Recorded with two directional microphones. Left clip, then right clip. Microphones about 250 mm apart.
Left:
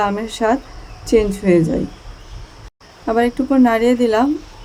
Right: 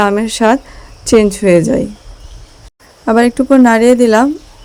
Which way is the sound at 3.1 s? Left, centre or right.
Right.